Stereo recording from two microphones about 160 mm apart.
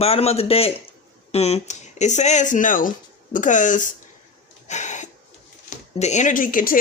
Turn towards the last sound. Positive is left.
turn(degrees=55)  # may be behind; listen again after turning